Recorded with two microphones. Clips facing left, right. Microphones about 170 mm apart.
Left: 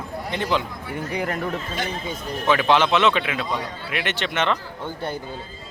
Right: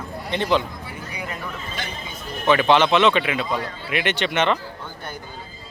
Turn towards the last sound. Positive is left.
turn(degrees=30)  # may be behind; listen again after turning